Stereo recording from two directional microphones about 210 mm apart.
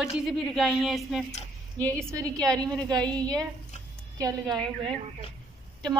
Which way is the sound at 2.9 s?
20° right (ahead or behind).